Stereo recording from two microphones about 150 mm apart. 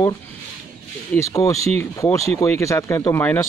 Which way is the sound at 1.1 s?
20° left (ahead or behind).